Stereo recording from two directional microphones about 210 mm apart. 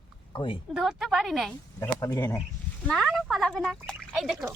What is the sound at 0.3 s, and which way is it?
Speech, 25° left (ahead or behind).